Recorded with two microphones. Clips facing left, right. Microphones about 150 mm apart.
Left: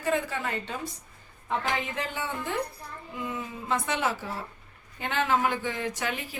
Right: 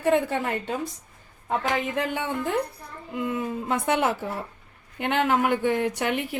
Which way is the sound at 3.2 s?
55° right (ahead or behind).